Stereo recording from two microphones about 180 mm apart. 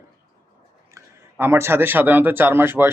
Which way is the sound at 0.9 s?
15° right (ahead or behind).